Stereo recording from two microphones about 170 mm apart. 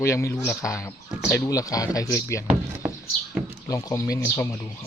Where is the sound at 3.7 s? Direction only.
20° left (ahead or behind).